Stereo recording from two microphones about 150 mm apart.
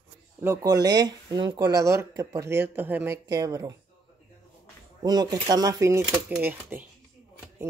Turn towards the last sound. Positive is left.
turn(degrees=-15)  # may be behind; listen again after turning